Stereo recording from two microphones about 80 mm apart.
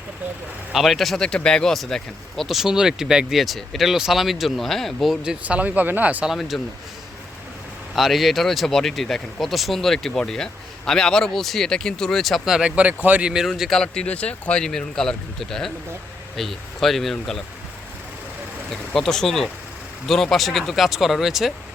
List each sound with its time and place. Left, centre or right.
0.7 s speech: centre
5.2 s speech: centre
6.2 s speech: centre
7.9 s speech: centre
12.5 s speech: centre
13.3 s speech: centre
18.7 s speech: centre